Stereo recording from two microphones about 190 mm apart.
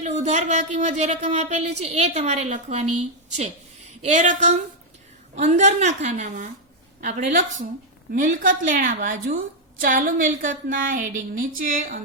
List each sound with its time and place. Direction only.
0.0 s a woman's voice: 35° right (ahead or behind)